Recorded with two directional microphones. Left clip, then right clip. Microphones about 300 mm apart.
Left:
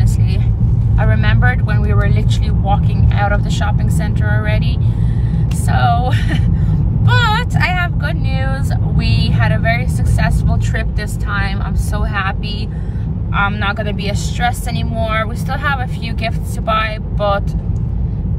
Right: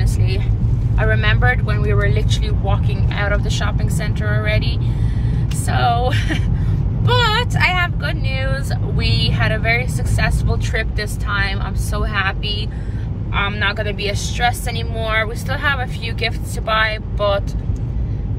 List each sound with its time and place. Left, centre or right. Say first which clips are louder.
0.9 s vehicle: right 2 dB; centre
2.6 s speech: left 5 dB; centre
5.7 s speech: left 1 dB; centre
9.2 s speech: left 2 dB; centre
13.3 s speech: left 2 dB; centre